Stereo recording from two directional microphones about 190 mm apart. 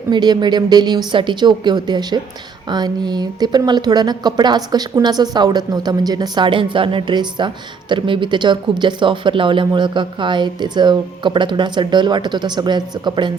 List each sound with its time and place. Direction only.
0.1 s speech: 20° right (ahead or behind)